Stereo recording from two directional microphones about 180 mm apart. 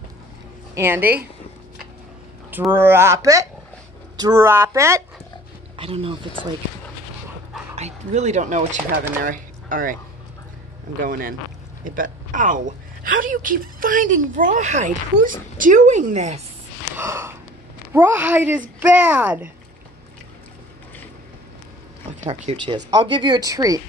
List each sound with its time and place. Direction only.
0.7 s speech: 10° right (ahead or behind)
2.7 s speech: 10° right (ahead or behind)
5.8 s speech: 30° right (ahead or behind)
7.7 s speech: 40° right (ahead or behind)
11.0 s a woman's voice: 50° right (ahead or behind)
16.9 s gasp: 15° right (ahead or behind)
17.9 s speech: 10° right (ahead or behind)
22.2 s speech: 35° right (ahead or behind); by 23.8 s 20° right (ahead or behind)